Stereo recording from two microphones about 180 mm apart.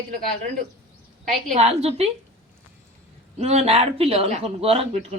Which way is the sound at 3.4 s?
35° right (ahead or behind).